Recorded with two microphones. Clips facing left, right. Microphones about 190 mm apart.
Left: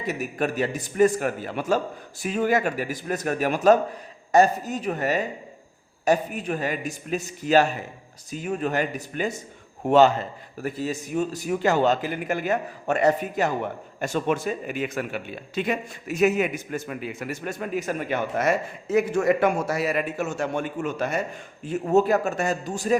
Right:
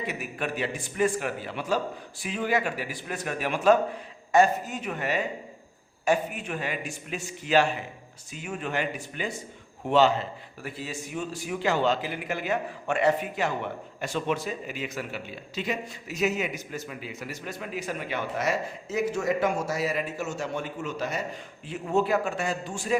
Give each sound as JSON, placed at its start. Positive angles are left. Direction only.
{"t": 0.0, "sound": "a man's voice", "side_deg": 40}